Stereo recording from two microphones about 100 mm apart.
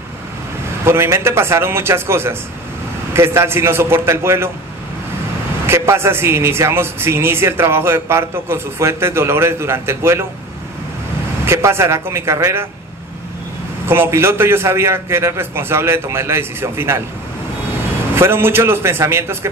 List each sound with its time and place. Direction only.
0.8 s a man's voice: 25° right (ahead or behind)
5.7 s a man's voice: 25° right (ahead or behind)
11.4 s a man's voice: 25° right (ahead or behind)
13.8 s a man's voice: 20° right (ahead or behind)
18.1 s a man's voice: 25° right (ahead or behind)